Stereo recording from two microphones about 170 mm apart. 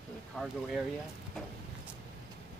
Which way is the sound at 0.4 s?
Centre (ahead or behind).